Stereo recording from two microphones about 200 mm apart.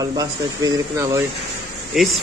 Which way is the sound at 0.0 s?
20° right (ahead or behind).